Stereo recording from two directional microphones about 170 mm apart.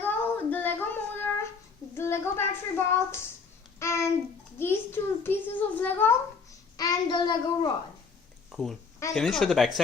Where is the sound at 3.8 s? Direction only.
15° left (ahead or behind).